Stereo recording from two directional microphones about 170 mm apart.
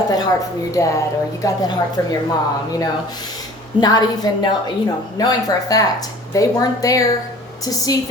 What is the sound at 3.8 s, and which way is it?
A woman's voice, 25° left (ahead or behind).